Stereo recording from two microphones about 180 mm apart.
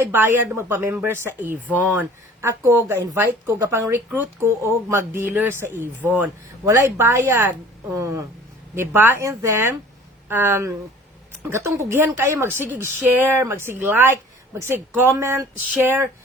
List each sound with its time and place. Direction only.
0.0 s speech: 10° right (ahead or behind)